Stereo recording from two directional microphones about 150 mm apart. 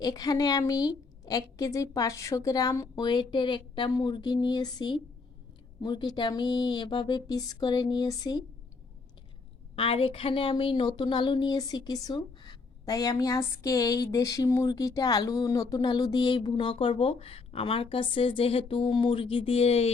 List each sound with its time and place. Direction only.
0.0 s a woman's voice: 25° left (ahead or behind)
9.7 s a woman's voice: 40° left (ahead or behind)